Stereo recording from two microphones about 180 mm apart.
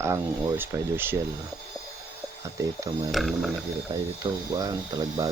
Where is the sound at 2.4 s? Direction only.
15° right (ahead or behind).